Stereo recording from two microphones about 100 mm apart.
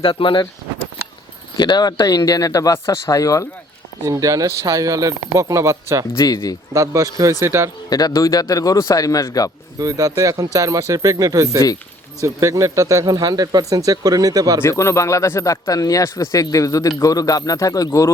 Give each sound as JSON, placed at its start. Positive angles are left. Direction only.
{"t": 0.0, "sound": "speech", "side_deg": 60}
{"t": 1.5, "sound": "a man's voice", "side_deg": 45}
{"t": 4.0, "sound": "speech", "side_deg": -35}
{"t": 7.9, "sound": "a man's voice", "side_deg": 40}
{"t": 9.7, "sound": "speech", "side_deg": -35}
{"t": 14.6, "sound": "a man's voice", "side_deg": 30}